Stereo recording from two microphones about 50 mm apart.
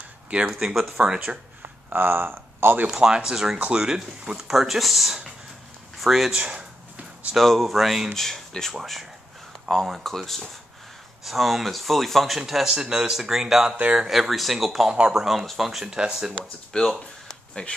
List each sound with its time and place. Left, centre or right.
0.5 s speech: centre
0.9 s speech: centre
1.9 s speech: right
3.0 s speech: centre
6.3 s a sound: right
7.3 s speech: centre
8.1 s speech: centre
14.9 s speech: centre
15.9 s speech: centre
16.7 s speech: centre
17.3 s a sound: centre